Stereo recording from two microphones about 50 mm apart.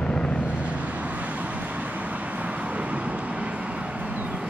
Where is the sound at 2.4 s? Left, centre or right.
Right.